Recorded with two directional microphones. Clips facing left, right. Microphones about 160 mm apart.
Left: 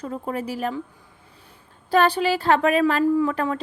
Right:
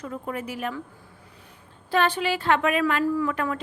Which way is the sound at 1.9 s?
40° left (ahead or behind).